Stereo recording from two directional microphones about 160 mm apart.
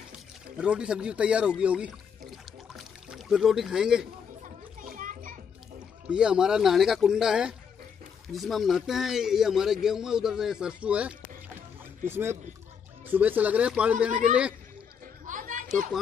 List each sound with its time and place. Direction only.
0.6 s speech: 5° right (ahead or behind)
2.7 s rowboat: centre (ahead or behind)
4.9 s music: 60° right (ahead or behind)
6.0 s speech: 5° right (ahead or behind)
15.2 s chatter: 55° right (ahead or behind)